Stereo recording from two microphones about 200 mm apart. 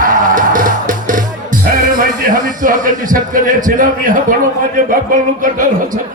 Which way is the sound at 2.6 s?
40° right (ahead or behind).